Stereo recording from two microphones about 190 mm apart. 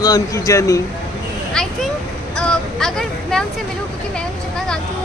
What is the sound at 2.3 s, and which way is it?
Vehicle, 5° left (ahead or behind).